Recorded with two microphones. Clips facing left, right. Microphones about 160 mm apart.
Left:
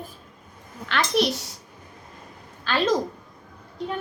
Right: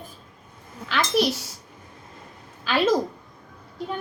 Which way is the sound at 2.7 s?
10° right (ahead or behind).